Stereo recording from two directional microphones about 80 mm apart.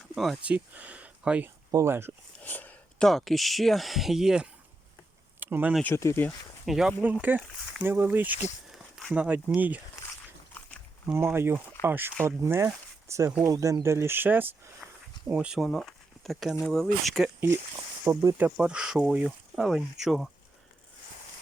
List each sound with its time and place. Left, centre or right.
0.4 s speech: centre
1.7 s speech: right
2.4 s a sound: left
3.0 s speech: centre
5.4 s a sound: right
6.2 s speech: left
6.7 s speech: centre
7.0 s speech: centre
8.7 s a sound: centre
9.1 s speech: centre
11.1 s speech: right
15.3 s speech: centre
18.0 s speech: right
18.3 s speech: centre